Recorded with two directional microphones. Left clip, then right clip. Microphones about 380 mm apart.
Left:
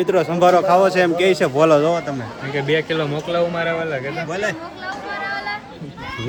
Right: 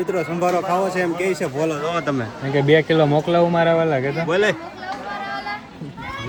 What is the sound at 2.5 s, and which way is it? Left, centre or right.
Speech, centre.